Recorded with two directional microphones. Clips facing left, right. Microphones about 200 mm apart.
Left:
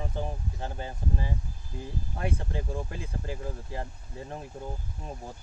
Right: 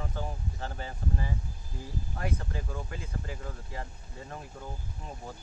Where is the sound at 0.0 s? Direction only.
20° left (ahead or behind).